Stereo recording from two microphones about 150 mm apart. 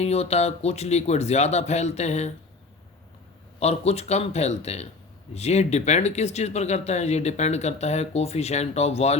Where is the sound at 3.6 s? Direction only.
45° left (ahead or behind).